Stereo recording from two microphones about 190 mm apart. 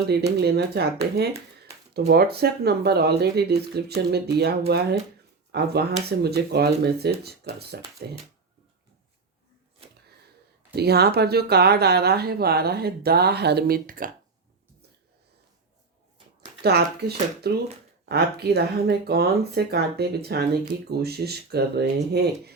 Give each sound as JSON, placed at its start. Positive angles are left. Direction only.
{"t": 0.4, "sound": "speech", "side_deg": -55}
{"t": 10.8, "sound": "speech", "side_deg": -55}
{"t": 16.6, "sound": "speech", "side_deg": -60}